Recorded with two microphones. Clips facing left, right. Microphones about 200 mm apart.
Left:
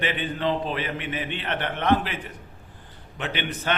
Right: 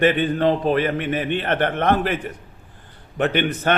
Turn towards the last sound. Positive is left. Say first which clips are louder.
# right 8 dB
turn(degrees=-50)  # may be behind; listen again after turning